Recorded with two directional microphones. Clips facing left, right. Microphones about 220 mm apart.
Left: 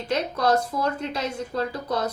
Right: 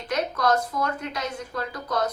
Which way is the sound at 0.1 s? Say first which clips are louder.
Left 1 dB; 30° left (ahead or behind).